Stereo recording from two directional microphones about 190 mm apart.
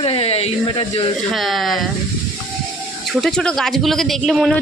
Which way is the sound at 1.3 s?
Centre (ahead or behind).